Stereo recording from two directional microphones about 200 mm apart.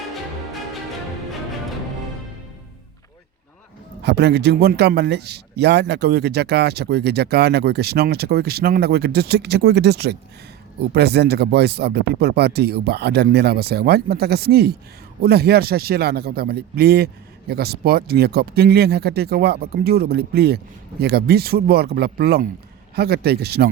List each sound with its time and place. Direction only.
4.0 s a man's voice: 55° right (ahead or behind)